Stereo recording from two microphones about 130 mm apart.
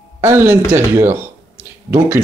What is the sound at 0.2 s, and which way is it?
Speech, 20° right (ahead or behind).